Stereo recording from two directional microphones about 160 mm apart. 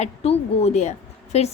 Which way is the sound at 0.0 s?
40° left (ahead or behind).